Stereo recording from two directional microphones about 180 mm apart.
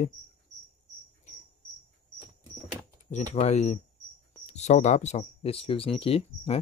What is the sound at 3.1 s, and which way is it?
Speech, 40° left (ahead or behind).